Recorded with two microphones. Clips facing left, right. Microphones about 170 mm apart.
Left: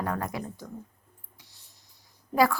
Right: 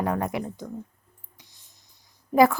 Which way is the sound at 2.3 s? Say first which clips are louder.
Right 5 dB; 20° right (ahead or behind).